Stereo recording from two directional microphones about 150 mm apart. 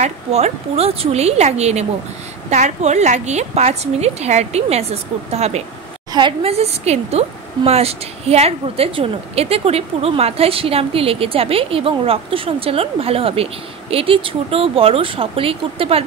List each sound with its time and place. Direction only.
0.0 s a woman's voice: 45° right (ahead or behind)